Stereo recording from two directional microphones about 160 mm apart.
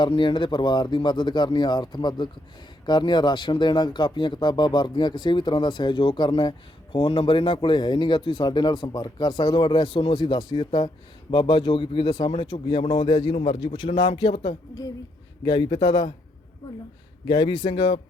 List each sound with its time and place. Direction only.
0.0 s speech: 30° left (ahead or behind)
17.2 s speech: 30° left (ahead or behind)